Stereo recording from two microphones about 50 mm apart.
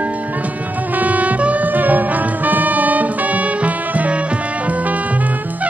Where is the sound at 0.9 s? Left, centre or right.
Right.